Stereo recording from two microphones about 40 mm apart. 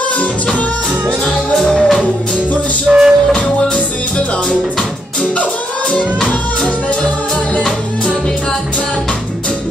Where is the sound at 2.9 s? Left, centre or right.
Centre.